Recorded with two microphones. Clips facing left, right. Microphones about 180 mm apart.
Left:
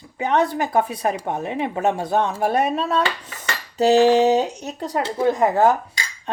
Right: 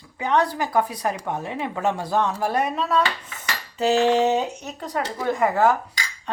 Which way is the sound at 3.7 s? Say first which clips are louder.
Left 4 dB; 35° left (ahead or behind).